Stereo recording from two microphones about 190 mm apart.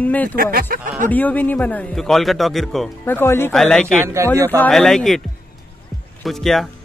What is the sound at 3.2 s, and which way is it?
Speech, 10° left (ahead or behind).